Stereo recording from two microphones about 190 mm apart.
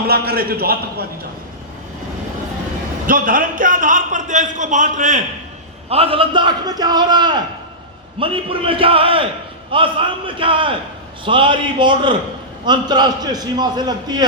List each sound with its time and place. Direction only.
0.1 s a man's voice: 55° right (ahead or behind)
3.1 s a man's voice: 45° right (ahead or behind)
5.9 s a man's voice: 30° right (ahead or behind)